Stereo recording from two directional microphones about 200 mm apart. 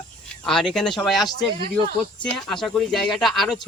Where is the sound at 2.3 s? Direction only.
5° left (ahead or behind).